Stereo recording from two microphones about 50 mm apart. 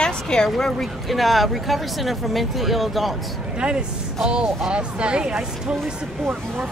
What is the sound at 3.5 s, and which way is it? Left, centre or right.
Speech, centre.